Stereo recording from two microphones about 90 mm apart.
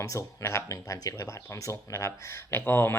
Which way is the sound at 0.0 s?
35° left (ahead or behind).